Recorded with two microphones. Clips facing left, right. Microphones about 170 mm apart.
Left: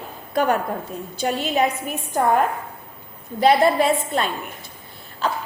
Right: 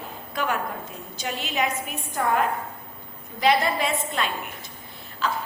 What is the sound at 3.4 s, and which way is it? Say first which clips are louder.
Speech: left 6 dB; 35° left (ahead or behind).